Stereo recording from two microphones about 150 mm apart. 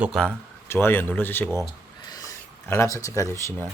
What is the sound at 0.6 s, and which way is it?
Speech, 15° left (ahead or behind).